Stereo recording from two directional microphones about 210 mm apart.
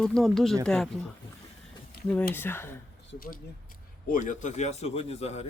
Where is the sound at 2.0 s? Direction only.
50° left (ahead or behind).